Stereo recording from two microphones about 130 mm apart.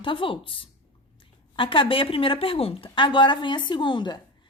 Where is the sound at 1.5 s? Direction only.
40° left (ahead or behind).